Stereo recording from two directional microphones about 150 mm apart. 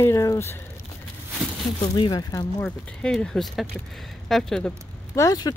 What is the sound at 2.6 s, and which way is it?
Speech, 5° left (ahead or behind).